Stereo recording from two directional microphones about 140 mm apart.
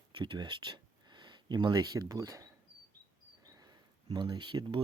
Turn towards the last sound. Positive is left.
turn(degrees=-35)  # may be behind; listen again after turning